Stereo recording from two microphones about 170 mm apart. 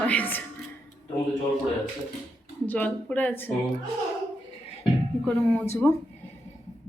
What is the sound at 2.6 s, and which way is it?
Speech, 10° left (ahead or behind).